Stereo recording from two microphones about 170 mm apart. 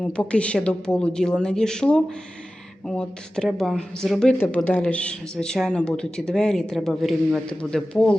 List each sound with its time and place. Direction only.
0.0 s speech: 5° left (ahead or behind)